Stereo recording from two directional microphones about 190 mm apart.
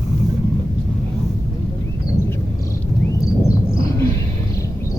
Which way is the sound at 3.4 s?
15° left (ahead or behind).